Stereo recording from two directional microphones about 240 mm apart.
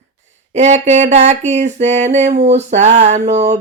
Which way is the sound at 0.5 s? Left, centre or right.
Right.